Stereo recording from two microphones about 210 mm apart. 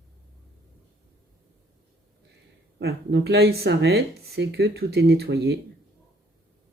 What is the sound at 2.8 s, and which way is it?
Speech, 50° right (ahead or behind).